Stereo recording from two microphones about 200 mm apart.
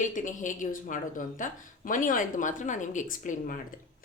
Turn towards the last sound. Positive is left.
turn(degrees=40)  # may be behind; listen again after turning